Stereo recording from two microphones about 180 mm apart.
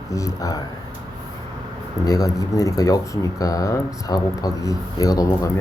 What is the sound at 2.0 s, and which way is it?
Speech, 20° left (ahead or behind).